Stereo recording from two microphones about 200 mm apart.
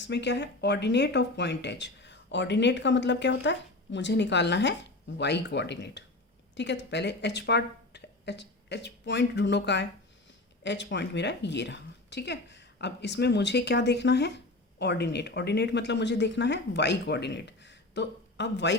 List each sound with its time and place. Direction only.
0.0 s a woman's voice: 60° left (ahead or behind)